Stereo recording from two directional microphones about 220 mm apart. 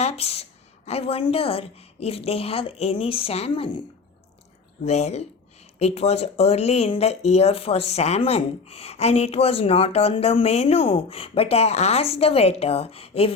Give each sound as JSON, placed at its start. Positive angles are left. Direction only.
{"t": 0.0, "sound": "speech", "side_deg": 30}